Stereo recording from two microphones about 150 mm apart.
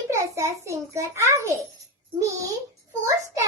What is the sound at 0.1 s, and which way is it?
A child's voice, 20° right (ahead or behind).